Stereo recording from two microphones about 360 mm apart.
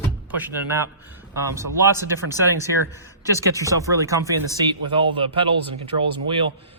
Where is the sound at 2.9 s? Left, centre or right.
Centre.